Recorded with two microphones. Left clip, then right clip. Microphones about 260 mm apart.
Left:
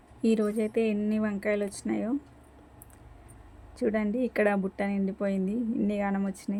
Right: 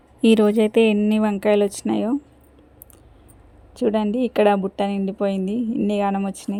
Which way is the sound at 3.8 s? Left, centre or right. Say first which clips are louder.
Right 8 dB; right.